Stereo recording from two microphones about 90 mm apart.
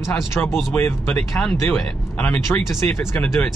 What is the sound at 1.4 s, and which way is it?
Speech, 10° left (ahead or behind).